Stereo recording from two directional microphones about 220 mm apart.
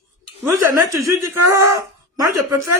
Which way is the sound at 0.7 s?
15° right (ahead or behind).